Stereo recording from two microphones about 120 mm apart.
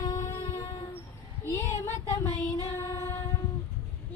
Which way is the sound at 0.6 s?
45° left (ahead or behind).